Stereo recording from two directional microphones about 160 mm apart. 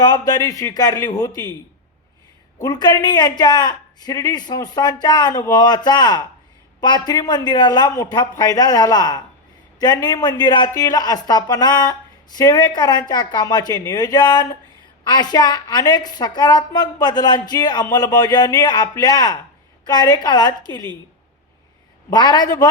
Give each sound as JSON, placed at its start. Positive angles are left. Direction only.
{"t": 0.0, "sound": "a woman's voice", "side_deg": 25}
{"t": 2.6, "sound": "a woman's voice", "side_deg": 25}
{"t": 22.1, "sound": "a woman's voice", "side_deg": 25}